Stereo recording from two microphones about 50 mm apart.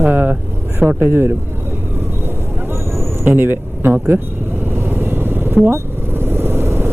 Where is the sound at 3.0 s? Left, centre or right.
Right.